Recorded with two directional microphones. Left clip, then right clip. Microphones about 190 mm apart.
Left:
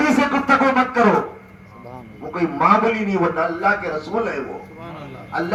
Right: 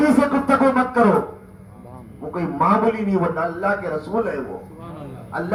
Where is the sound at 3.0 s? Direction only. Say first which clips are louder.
Left 2 dB; 25° right (ahead or behind).